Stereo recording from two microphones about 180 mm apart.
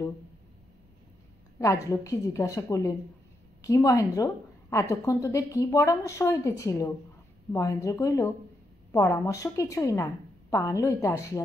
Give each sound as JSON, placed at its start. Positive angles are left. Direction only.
{"t": 1.6, "sound": "a woman's voice", "side_deg": 20}